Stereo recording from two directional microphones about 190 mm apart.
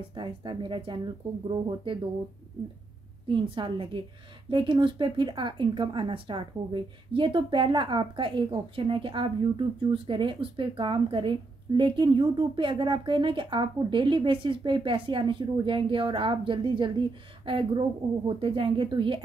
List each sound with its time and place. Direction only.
0.1 s speech: 25° right (ahead or behind)
3.3 s speech: 25° right (ahead or behind)